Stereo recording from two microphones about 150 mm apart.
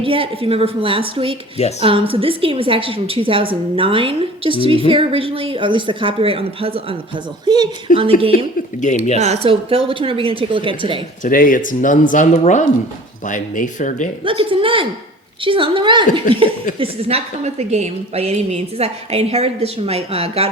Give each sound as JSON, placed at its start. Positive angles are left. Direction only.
{"t": 0.0, "sound": "a woman's voice", "side_deg": -35}
{"t": 7.4, "sound": "a woman's voice", "side_deg": -25}
{"t": 7.9, "sound": "speech", "side_deg": 60}
{"t": 9.2, "sound": "a woman's voice", "side_deg": -45}
{"t": 11.2, "sound": "speech", "side_deg": 65}
{"t": 14.3, "sound": "a woman's voice", "side_deg": -35}